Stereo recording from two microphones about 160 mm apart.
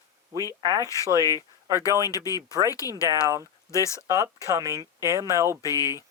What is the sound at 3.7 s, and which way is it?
Speech, 20° left (ahead or behind).